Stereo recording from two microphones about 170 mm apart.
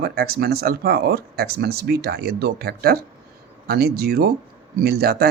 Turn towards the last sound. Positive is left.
turn(degrees=-65)  # may be behind; listen again after turning